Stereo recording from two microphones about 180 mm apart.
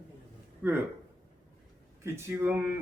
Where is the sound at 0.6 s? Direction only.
10° right (ahead or behind).